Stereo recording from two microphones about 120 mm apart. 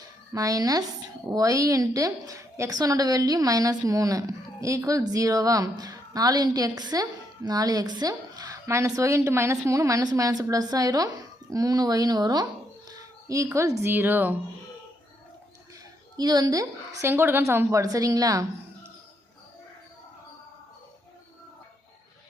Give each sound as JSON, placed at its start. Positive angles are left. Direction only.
{"t": 0.3, "sound": "a woman's voice", "side_deg": -30}
{"t": 16.1, "sound": "a woman's voice", "side_deg": -35}
{"t": 17.1, "sound": "a woman's voice", "side_deg": -20}